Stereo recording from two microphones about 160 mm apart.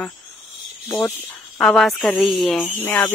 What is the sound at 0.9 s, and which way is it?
Speech, 25° left (ahead or behind).